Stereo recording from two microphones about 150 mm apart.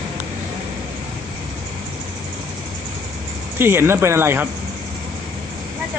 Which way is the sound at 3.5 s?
15° right (ahead or behind).